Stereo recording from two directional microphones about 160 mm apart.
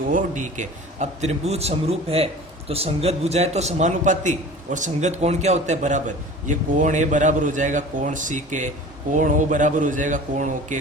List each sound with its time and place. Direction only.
0.1 s a man's voice: 55° right (ahead or behind)